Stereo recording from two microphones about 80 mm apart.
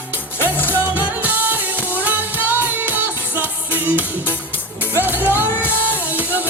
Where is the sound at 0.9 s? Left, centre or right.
Right.